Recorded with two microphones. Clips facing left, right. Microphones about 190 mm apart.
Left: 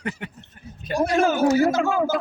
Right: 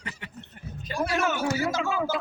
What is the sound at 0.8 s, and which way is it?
Speech, 45° left (ahead or behind).